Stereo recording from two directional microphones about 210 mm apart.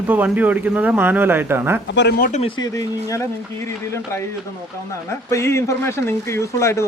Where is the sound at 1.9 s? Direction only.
50° left (ahead or behind).